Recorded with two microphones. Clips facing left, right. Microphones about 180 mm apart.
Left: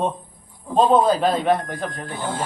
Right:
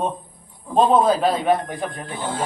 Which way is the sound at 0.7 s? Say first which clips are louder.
Even; 5° right (ahead or behind).